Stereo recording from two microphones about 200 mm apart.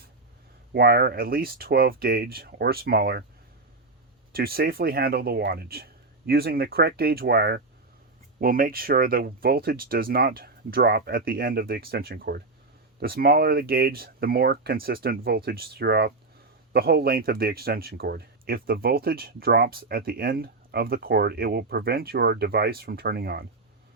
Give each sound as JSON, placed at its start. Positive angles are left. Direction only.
{"t": 0.7, "sound": "speech", "side_deg": -50}
{"t": 4.3, "sound": "speech", "side_deg": -50}